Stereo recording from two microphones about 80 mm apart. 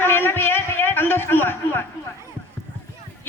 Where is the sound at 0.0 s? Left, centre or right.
Left.